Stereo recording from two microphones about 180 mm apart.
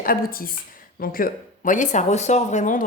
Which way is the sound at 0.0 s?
50° left (ahead or behind).